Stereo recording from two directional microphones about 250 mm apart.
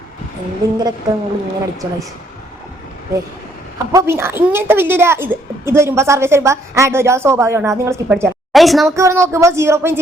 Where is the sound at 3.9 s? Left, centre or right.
Centre.